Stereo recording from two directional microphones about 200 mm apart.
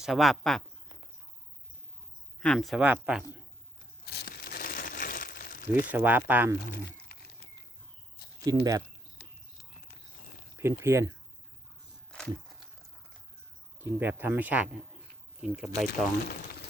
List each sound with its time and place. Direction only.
0.0 s speech: centre (ahead or behind)
2.4 s speech: 5° left (ahead or behind)
4.0 s crumpling: 55° left (ahead or behind)
5.9 s speech: 10° right (ahead or behind)
6.7 s a sound: 50° left (ahead or behind)
8.4 s speech: 15° right (ahead or behind)
9.2 s a sound: 55° left (ahead or behind)
10.6 s speech: 15° right (ahead or behind)
12.1 s a sound: centre (ahead or behind)
13.8 s speech: 10° right (ahead or behind)